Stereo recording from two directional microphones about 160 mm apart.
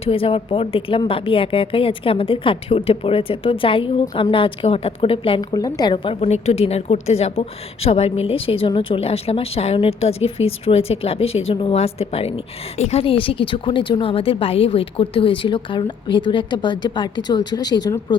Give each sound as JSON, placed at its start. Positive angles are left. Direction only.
{"t": 0.0, "sound": "a woman's voice", "side_deg": 35}